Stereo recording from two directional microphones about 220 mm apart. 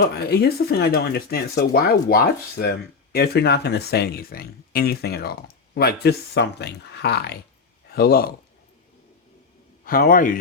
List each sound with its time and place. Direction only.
0.0 s speech: 50° left (ahead or behind)
9.8 s a man's voice: 40° left (ahead or behind)